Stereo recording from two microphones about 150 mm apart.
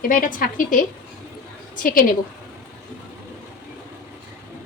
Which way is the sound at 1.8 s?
75° left (ahead or behind).